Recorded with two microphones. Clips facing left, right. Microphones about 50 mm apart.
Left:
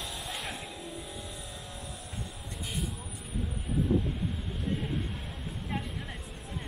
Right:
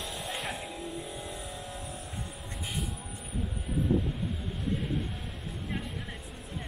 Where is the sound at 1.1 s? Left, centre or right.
Centre.